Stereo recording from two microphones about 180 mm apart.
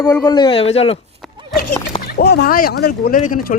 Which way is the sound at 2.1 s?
65° left (ahead or behind).